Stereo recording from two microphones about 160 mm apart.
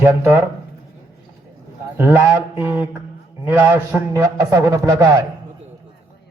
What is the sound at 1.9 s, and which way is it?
A man's voice, 15° right (ahead or behind).